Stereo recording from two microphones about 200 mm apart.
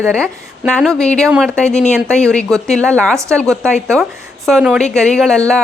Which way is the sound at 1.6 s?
35° left (ahead or behind).